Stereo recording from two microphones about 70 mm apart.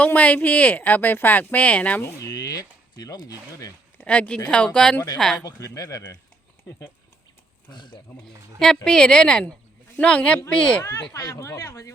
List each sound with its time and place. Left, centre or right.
0.0 s speech: centre
2.0 s speech: left
2.3 s speech: left
3.9 s speech: centre
5.5 s speech: left
7.7 s speech: left
8.5 s speech: centre
10.8 s speech: left